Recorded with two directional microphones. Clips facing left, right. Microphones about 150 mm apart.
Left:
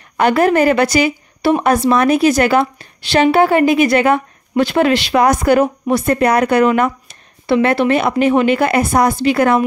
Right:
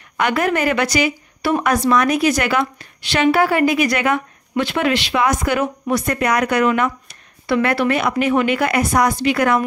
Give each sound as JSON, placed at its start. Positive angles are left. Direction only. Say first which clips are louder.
{"t": 0.2, "sound": "a woman's voice", "louder": "left 6 dB", "side_deg": 35}
{"t": 7.1, "sound": "a woman's voice", "louder": "left 4 dB", "side_deg": 25}